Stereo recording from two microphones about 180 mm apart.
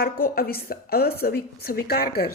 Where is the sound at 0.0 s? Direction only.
55° left (ahead or behind).